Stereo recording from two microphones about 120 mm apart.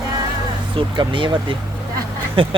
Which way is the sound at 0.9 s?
45° right (ahead or behind).